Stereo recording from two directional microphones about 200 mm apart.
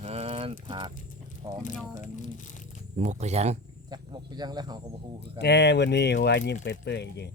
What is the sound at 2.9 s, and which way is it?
Speech, 35° right (ahead or behind).